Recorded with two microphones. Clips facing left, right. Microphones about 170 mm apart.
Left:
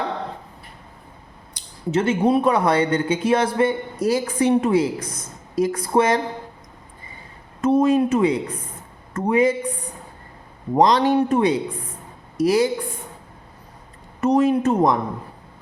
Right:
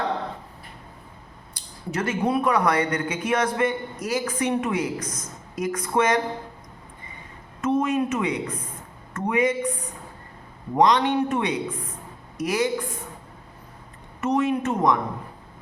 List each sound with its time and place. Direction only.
1.5 s speech: 25° left (ahead or behind)
7.6 s speech: 35° left (ahead or behind)
10.8 s speech: 35° left (ahead or behind)
14.2 s speech: 35° left (ahead or behind)